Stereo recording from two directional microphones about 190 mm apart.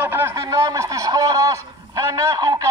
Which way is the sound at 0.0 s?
10° right (ahead or behind).